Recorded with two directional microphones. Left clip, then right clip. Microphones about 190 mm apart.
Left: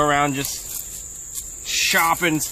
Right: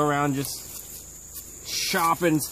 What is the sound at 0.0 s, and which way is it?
Cricket, 20° left (ahead or behind).